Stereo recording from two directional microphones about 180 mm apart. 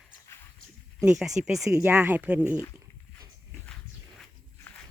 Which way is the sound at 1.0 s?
5° right (ahead or behind).